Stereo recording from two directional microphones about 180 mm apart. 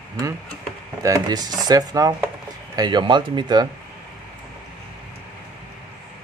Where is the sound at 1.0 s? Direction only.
20° right (ahead or behind).